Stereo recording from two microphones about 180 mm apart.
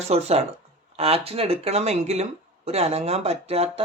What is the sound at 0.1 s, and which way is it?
Speech, 35° right (ahead or behind).